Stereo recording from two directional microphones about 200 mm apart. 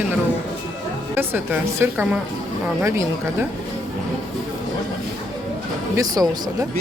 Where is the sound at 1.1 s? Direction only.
10° right (ahead or behind).